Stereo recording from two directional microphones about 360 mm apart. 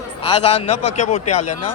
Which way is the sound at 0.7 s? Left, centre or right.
Left.